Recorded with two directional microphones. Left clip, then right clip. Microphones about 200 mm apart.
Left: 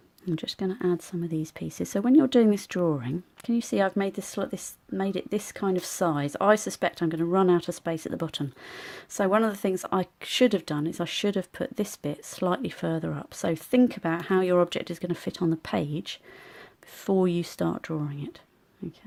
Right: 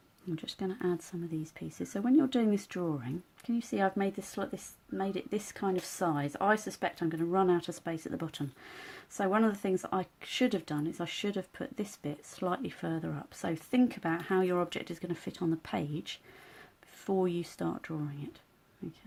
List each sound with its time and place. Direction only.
0.3 s speech: 35° left (ahead or behind)